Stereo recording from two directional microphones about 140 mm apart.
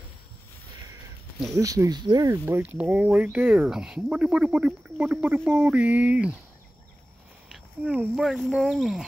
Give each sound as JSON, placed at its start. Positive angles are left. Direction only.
{"t": 1.5, "sound": "speech", "side_deg": -25}
{"t": 7.5, "sound": "speech", "side_deg": -10}